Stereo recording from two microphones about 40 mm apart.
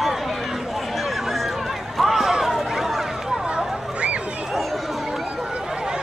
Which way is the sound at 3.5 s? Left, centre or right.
Right.